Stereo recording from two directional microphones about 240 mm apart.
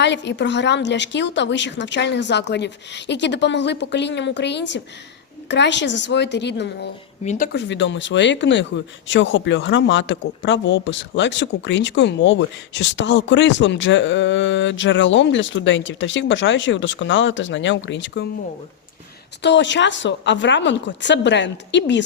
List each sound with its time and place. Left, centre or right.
0.0 s speech: left
7.3 s speech: left
19.4 s speech: left